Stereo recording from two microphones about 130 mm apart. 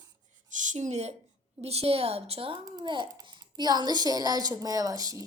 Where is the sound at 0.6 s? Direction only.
65° right (ahead or behind).